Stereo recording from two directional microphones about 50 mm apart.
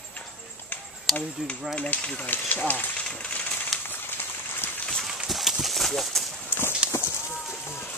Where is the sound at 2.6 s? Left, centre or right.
Left.